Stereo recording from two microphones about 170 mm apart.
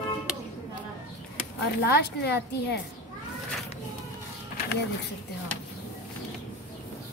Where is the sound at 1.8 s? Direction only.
75° left (ahead or behind).